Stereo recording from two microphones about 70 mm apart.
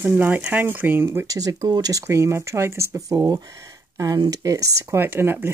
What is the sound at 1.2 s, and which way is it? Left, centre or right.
Speech, right.